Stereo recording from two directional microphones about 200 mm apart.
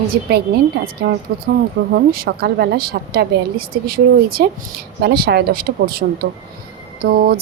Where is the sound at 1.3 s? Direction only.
50° right (ahead or behind).